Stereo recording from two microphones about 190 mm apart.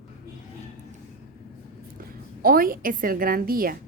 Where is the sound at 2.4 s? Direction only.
50° right (ahead or behind).